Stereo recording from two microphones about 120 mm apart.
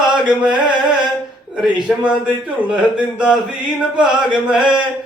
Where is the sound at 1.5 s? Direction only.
Centre (ahead or behind).